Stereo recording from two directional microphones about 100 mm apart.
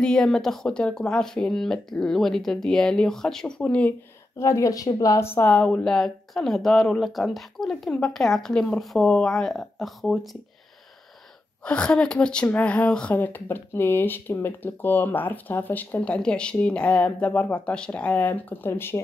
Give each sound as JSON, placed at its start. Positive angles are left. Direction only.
{"t": 0.0, "sound": "speech", "side_deg": 5}
{"t": 4.4, "sound": "speech", "side_deg": 30}
{"t": 11.6, "sound": "speech", "side_deg": 10}